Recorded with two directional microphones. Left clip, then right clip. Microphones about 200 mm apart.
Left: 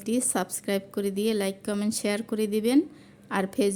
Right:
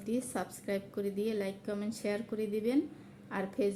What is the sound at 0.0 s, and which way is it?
A woman's voice, 50° left (ahead or behind).